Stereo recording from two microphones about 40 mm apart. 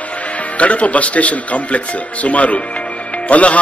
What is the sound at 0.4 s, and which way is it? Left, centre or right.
A man's voice, left.